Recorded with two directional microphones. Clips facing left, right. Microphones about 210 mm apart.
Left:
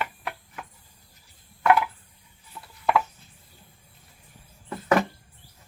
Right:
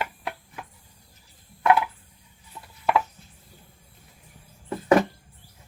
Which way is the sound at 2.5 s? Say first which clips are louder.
Even; 15° right (ahead or behind).